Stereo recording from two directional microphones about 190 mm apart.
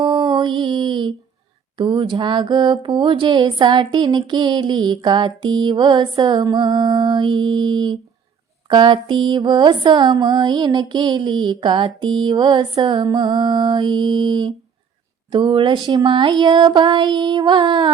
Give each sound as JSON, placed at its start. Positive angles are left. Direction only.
{"t": 0.0, "sound": "mantra", "side_deg": -25}